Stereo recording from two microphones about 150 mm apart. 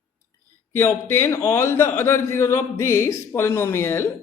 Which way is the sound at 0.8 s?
15° left (ahead or behind).